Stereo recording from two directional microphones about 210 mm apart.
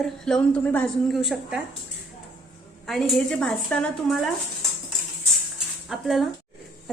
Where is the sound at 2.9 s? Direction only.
Centre (ahead or behind).